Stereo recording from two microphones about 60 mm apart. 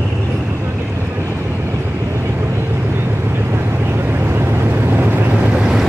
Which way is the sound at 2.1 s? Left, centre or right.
Right.